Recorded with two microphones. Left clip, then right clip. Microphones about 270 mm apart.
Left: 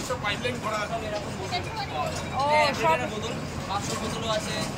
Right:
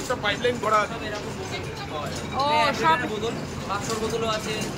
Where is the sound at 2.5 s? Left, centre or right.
Centre.